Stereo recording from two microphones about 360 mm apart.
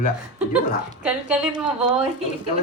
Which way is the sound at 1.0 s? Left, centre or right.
Centre.